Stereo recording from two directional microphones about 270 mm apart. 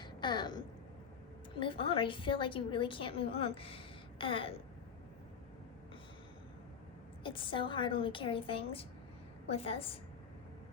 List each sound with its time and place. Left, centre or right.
0.0 s a sound: centre
1.5 s a woman's voice: centre
7.3 s a woman's voice: centre